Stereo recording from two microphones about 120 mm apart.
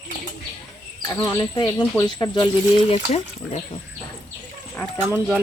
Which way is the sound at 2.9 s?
65° left (ahead or behind).